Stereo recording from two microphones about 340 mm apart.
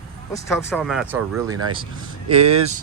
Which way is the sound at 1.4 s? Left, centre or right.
Right.